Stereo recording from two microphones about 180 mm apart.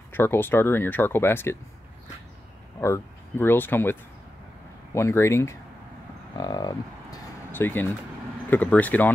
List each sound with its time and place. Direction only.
0.1 s speech: 10° left (ahead or behind)
2.8 s speech: 15° left (ahead or behind)
6.3 s a sound: 20° left (ahead or behind)
8.5 s speech: 10° left (ahead or behind)